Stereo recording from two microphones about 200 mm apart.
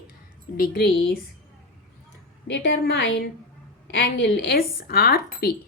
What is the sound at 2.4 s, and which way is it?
Speech, 55° left (ahead or behind).